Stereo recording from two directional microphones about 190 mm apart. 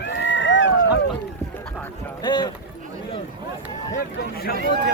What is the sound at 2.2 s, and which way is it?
Run, 25° left (ahead or behind).